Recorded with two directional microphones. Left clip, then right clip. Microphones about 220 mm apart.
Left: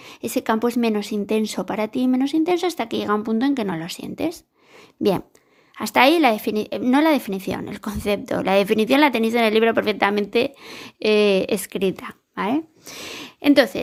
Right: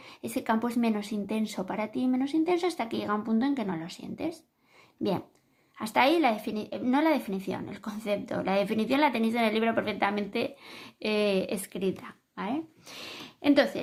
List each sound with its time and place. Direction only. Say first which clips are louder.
0.0 s speech: left 9 dB; 40° left (ahead or behind)